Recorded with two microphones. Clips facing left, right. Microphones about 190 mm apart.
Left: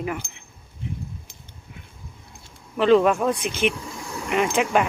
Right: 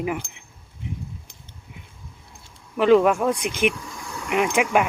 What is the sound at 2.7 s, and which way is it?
Speech, 10° right (ahead or behind).